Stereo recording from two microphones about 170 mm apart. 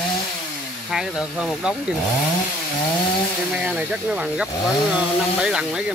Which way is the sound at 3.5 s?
5° right (ahead or behind).